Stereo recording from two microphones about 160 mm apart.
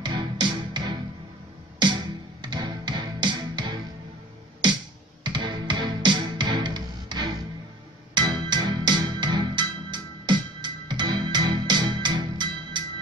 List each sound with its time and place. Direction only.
0.0 s music: 30° right (ahead or behind)
2.4 s music: 30° right (ahead or behind)
5.2 s music: 30° right (ahead or behind)